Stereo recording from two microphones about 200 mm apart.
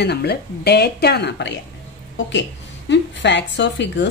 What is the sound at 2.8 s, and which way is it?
Speech, 60° left (ahead or behind).